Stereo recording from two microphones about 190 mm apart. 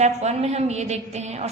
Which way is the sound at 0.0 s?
35° right (ahead or behind).